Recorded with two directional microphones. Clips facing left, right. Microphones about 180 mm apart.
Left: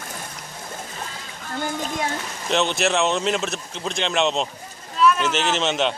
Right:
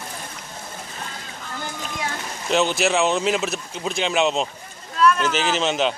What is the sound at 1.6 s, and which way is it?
Speech, 45° left (ahead or behind).